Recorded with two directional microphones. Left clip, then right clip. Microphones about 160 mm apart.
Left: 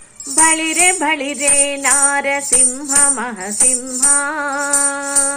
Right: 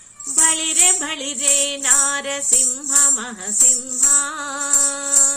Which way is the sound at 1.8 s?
20° right (ahead or behind).